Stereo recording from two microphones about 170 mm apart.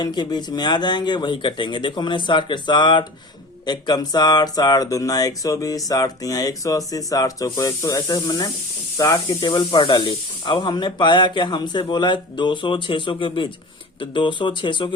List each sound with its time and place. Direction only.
0.0 s speech: 25° left (ahead or behind)